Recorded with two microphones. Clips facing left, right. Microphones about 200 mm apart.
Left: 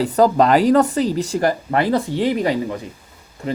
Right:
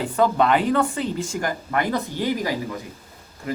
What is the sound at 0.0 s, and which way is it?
Speech, 35° left (ahead or behind).